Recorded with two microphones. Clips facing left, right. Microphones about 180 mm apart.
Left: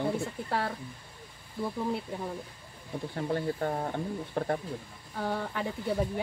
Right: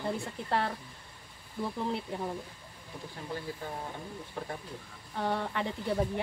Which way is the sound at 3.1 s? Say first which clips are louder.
Left 8 dB; 60° left (ahead or behind).